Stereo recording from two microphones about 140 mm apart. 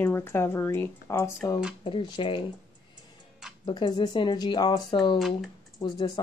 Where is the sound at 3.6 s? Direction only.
35° left (ahead or behind).